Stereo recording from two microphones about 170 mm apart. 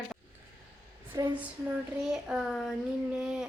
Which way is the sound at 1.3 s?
10° right (ahead or behind).